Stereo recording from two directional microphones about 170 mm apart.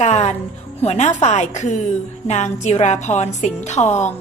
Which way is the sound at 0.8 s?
40° left (ahead or behind).